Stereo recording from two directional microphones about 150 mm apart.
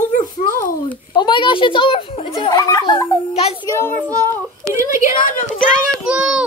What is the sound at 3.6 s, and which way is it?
A child's voice, 15° left (ahead or behind).